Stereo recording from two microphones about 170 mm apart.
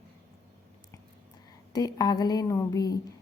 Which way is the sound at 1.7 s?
20° left (ahead or behind).